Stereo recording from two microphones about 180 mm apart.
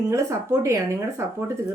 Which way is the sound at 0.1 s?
15° right (ahead or behind).